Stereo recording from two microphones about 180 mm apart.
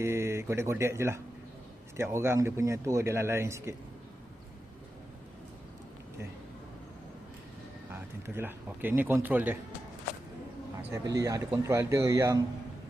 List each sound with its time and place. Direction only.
0.0 s speech: 15° right (ahead or behind)
7.9 s speech: 10° right (ahead or behind)
11.1 s speech: 20° right (ahead or behind)